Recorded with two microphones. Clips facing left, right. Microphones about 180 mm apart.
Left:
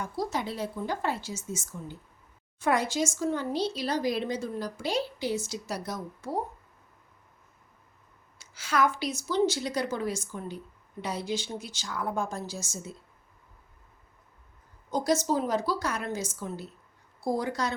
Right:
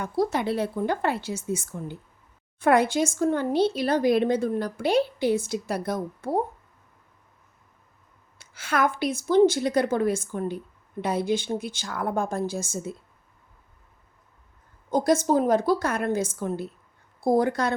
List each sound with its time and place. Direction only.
0.0 s speech: 60° right (ahead or behind)
8.4 s speech: 55° right (ahead or behind)
14.8 s a woman's voice: 55° right (ahead or behind)